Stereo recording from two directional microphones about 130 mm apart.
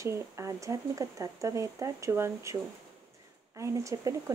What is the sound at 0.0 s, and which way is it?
Speech, 20° right (ahead or behind).